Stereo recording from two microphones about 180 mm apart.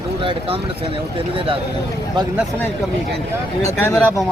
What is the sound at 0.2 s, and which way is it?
Speech, 30° right (ahead or behind).